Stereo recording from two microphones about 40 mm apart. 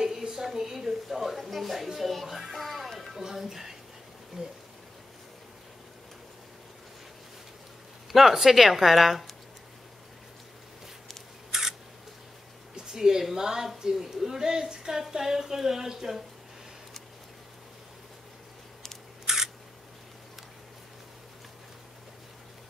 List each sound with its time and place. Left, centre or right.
0.4 s a woman's voice: centre
2.3 s music: centre
3.1 s a woman's voice: centre
8.1 s a woman's voice: centre
11.5 s camera: centre
12.7 s a woman's voice: centre
19.2 s camera: centre